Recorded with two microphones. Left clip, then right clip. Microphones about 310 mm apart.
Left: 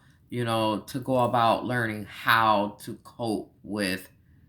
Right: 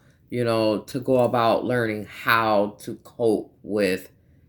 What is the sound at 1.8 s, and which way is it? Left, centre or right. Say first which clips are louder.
Speech: right 2 dB; centre.